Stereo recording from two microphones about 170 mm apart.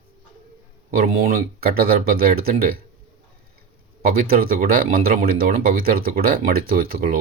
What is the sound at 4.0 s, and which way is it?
Speech, 60° right (ahead or behind).